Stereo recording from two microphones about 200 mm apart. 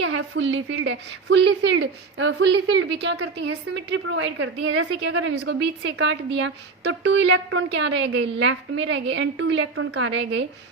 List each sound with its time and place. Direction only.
0.0 s a woman's voice: 85° right; by 10.4 s 65° right (ahead or behind)